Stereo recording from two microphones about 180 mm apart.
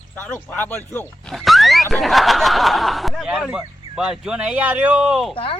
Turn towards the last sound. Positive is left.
turn(degrees=30)  # may be behind; listen again after turning